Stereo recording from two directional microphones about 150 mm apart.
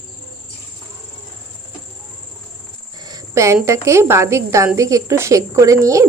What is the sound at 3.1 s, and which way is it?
Speech, 20° right (ahead or behind).